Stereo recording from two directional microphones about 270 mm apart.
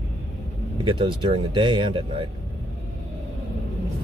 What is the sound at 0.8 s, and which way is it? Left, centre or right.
Speech, centre.